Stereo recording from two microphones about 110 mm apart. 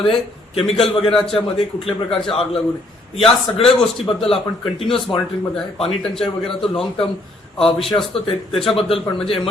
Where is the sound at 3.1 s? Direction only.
60° left (ahead or behind).